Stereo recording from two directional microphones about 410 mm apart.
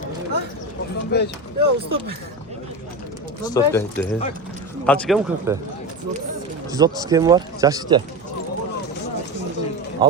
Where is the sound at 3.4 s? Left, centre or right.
Centre.